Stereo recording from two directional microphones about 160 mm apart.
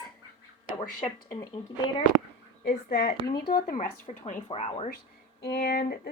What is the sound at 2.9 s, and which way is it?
Speech, 70° left (ahead or behind).